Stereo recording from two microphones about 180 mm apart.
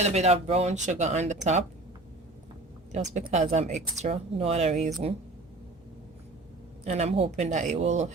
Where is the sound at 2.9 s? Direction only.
40° right (ahead or behind).